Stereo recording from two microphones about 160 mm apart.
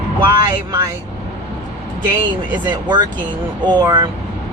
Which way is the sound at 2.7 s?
25° right (ahead or behind).